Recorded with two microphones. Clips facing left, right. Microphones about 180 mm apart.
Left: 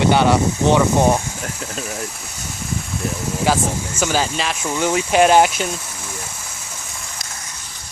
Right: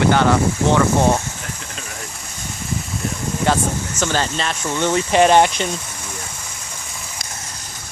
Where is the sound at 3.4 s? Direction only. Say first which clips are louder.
Even; 10° left (ahead or behind).